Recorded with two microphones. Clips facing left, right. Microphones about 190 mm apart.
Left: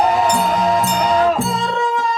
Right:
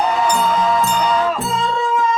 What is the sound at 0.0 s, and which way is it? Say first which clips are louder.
Music: left 2 dB; 40° left (ahead or behind).